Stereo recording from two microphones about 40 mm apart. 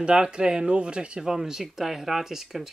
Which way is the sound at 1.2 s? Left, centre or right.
Centre.